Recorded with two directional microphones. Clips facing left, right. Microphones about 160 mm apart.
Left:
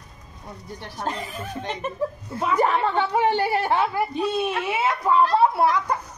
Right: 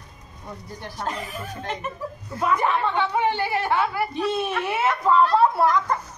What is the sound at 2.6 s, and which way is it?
A woman's voice, 40° left (ahead or behind).